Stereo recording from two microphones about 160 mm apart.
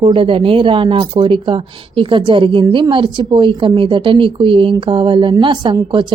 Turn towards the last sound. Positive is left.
turn(degrees=-30)  # may be behind; listen again after turning